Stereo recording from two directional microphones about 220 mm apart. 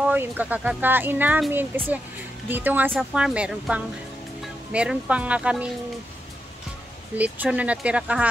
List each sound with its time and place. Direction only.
0.0 s speech: 10° right (ahead or behind)
7.2 s speech: 5° right (ahead or behind)